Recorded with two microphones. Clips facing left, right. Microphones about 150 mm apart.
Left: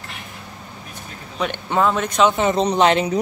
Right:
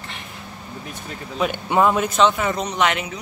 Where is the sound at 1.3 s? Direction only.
5° right (ahead or behind).